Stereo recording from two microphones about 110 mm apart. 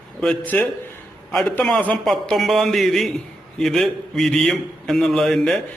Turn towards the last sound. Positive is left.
turn(degrees=5)  # may be behind; listen again after turning